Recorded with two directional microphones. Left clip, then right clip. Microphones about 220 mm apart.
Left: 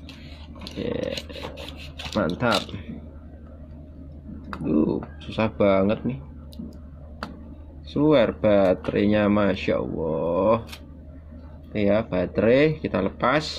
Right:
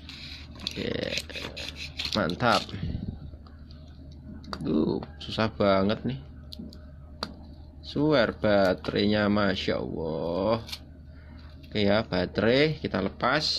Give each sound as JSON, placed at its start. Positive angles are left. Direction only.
{"t": 0.7, "sound": "dog", "side_deg": -20}
{"t": 1.7, "sound": "filing", "side_deg": -10}
{"t": 2.3, "sound": "speech", "side_deg": -15}
{"t": 4.5, "sound": "speech", "side_deg": -15}
{"t": 7.8, "sound": "speech", "side_deg": -10}
{"t": 11.7, "sound": "speech", "side_deg": -20}